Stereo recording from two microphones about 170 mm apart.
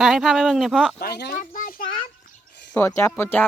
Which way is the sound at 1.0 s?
70° left (ahead or behind).